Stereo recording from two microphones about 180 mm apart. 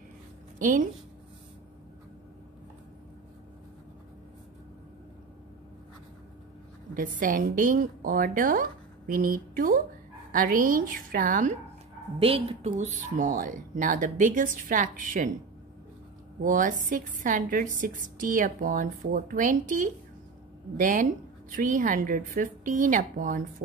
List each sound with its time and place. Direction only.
0.6 s a woman's voice: 45° right (ahead or behind)
6.9 s a woman's voice: 50° right (ahead or behind)
12.2 s a woman's voice: 30° right (ahead or behind); by 15.3 s 45° right (ahead or behind)
16.4 s a woman's voice: 45° right (ahead or behind)